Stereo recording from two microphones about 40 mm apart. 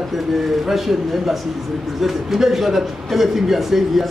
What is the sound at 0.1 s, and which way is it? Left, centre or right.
A man's voice, centre.